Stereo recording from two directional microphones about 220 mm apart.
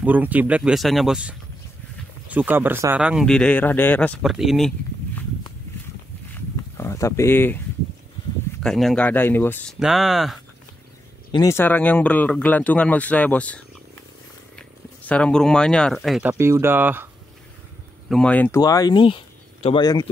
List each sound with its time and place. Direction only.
0.0 s speech: 5° right (ahead or behind)
6.8 s speech: 15° left (ahead or behind)
8.6 s speech: centre (ahead or behind)
9.8 s speech: centre (ahead or behind)
11.3 s speech: 10° left (ahead or behind)
15.0 s speech: 5° left (ahead or behind)
18.0 s speech: 5° left (ahead or behind); by 20.1 s 20° left (ahead or behind)